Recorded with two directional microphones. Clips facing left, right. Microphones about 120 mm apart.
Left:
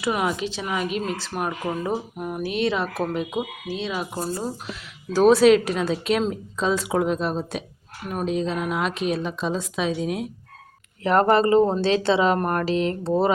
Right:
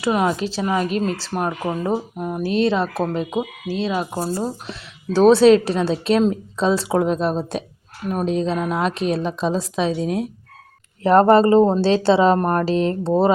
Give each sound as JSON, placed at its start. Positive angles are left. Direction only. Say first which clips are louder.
{"t": 0.0, "sound": "speech", "louder": "right 4 dB", "side_deg": -30}